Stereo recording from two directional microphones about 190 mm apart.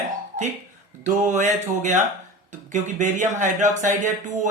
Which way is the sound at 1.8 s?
40° right (ahead or behind).